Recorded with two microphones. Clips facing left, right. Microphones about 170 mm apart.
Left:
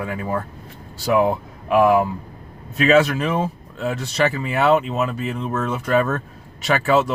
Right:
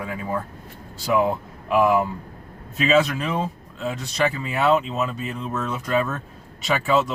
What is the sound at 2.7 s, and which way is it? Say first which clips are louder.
Speech: left 4 dB; 60° left (ahead or behind).